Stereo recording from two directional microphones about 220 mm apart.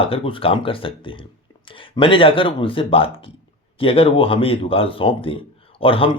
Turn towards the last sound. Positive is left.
turn(degrees=25)  # may be behind; listen again after turning